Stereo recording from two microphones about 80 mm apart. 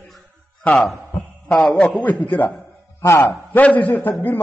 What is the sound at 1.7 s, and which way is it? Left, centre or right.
Speech, centre.